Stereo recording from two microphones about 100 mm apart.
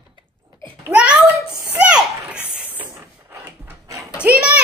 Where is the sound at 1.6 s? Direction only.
10° right (ahead or behind).